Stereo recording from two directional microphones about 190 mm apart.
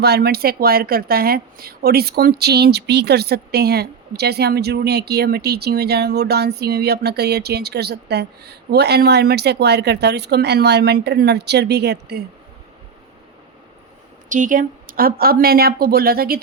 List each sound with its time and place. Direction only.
0.0 s speech: 55° right (ahead or behind)
14.3 s speech: 45° right (ahead or behind)